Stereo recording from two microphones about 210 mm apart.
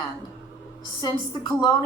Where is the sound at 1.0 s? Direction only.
15° left (ahead or behind).